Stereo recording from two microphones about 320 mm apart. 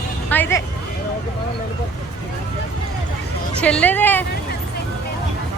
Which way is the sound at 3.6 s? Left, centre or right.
Centre.